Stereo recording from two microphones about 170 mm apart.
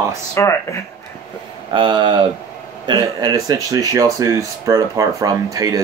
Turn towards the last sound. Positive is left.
turn(degrees=-20)  # may be behind; listen again after turning